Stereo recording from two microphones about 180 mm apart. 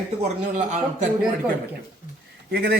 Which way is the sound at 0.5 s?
45° right (ahead or behind).